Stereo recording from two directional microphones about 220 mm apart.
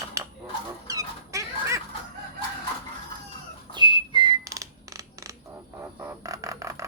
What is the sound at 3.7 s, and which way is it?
Whistling, 20° right (ahead or behind).